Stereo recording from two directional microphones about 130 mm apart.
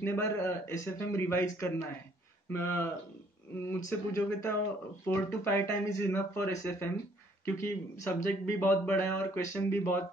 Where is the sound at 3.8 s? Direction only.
20° left (ahead or behind).